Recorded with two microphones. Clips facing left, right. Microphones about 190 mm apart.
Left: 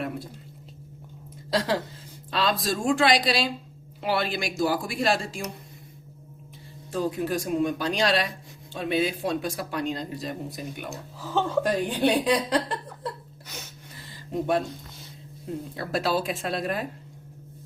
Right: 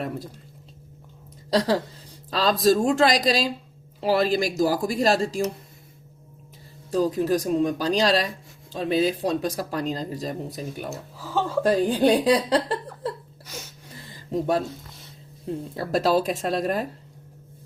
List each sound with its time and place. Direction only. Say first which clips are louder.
1.5 s a woman's voice: right 4 dB; 40° right (ahead or behind)
6.9 s speech: right 5 dB; 40° right (ahead or behind)
10.8 s speech: right 2 dB; 5° right (ahead or behind)
11.6 s speech: right 4 dB; 35° right (ahead or behind)
15.7 s speech: right 5 dB; 35° right (ahead or behind)